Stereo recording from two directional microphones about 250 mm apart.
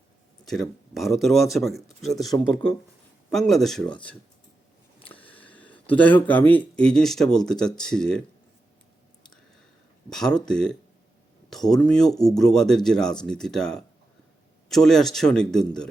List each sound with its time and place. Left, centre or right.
0.4 s speech: centre
5.4 s a sound: centre
5.9 s speech: centre
10.1 s speech: centre